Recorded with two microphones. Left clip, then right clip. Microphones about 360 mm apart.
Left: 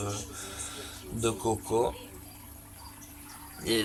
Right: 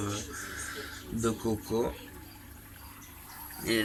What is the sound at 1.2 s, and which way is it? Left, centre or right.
Speech, left.